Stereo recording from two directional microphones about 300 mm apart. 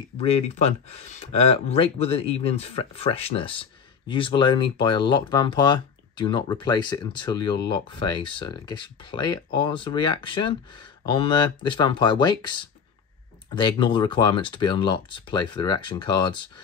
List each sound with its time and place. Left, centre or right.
0.2 s speech: left